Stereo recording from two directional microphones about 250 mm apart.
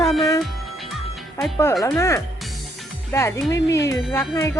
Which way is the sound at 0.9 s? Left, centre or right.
Centre.